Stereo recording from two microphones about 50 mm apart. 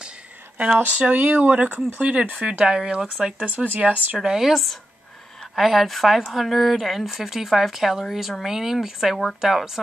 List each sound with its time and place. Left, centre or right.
0.7 s speech: right
2.4 s speech: centre
3.4 s speech: right
4.2 s speech: centre